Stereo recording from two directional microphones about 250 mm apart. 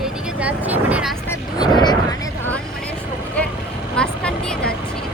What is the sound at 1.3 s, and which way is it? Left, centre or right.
Vehicle, centre.